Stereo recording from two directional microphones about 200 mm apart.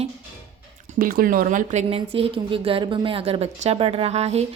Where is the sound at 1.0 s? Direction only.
45° right (ahead or behind).